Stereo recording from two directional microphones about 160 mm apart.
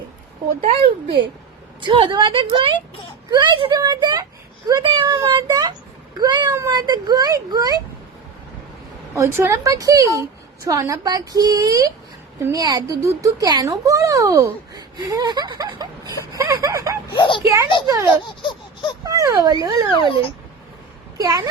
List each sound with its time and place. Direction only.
0.6 s speech: 35° right (ahead or behind)
9.1 s speech: 20° right (ahead or behind)
17.2 s a child's voice: 30° left (ahead or behind)
17.8 s speech: 20° right (ahead or behind)
21.2 s speech: 20° right (ahead or behind)